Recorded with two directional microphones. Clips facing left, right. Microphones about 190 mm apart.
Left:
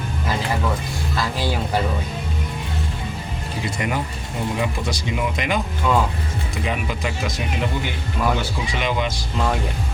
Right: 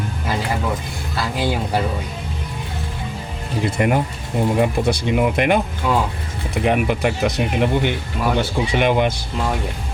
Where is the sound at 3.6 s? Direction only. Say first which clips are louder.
Right 7 dB; 50° right (ahead or behind).